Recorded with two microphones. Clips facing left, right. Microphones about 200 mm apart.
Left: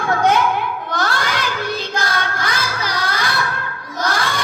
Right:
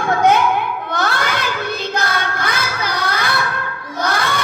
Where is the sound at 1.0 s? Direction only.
60° right (ahead or behind).